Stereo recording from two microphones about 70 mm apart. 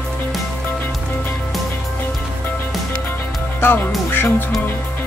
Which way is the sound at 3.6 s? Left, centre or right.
Left.